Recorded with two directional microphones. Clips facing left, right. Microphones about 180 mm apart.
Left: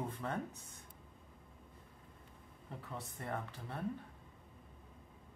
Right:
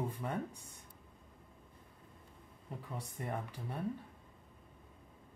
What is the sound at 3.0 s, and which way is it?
Speech, 15° right (ahead or behind).